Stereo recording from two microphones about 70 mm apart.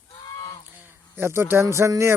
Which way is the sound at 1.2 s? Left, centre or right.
Right.